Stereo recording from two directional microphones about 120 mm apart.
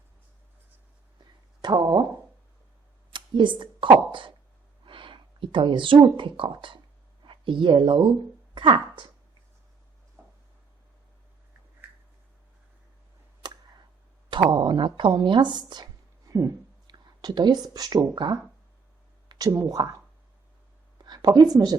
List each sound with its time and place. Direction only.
1.2 s a sound: 35° right (ahead or behind)
3.1 s speech: 40° right (ahead or behind)
13.4 s tick: 40° right (ahead or behind)
14.3 s a woman's voice: 40° right (ahead or behind)
21.0 s a sound: 35° right (ahead or behind)
21.5 s speech: 35° right (ahead or behind)